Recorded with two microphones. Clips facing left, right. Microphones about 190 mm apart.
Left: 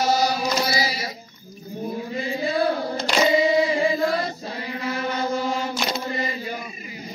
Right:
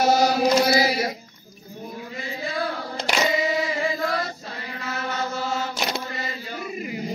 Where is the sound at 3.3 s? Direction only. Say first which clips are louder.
Left 5 dB; 30° left (ahead or behind).